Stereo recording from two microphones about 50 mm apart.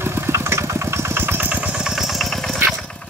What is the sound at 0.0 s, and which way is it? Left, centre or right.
Vehicle, right.